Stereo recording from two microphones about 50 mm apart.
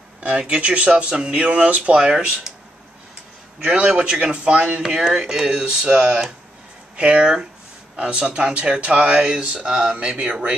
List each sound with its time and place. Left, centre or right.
0.2 s a man's voice: right
3.5 s a man's voice: centre
4.8 s a man's voice: centre
10.1 s a man's voice: right